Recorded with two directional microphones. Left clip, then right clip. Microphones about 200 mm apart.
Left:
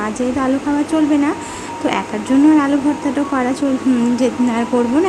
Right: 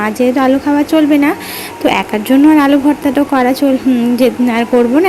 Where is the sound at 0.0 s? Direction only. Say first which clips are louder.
Right 7 dB; 15° right (ahead or behind).